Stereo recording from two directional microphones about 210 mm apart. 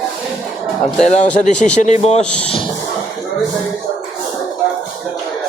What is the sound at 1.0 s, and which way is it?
Speech, 35° left (ahead or behind).